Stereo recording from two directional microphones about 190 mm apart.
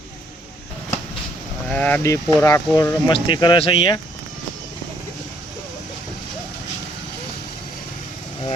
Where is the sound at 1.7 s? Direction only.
10° left (ahead or behind); by 4.0 s 25° left (ahead or behind).